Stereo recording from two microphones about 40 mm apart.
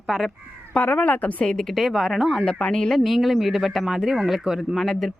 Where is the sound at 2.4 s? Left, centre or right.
Left.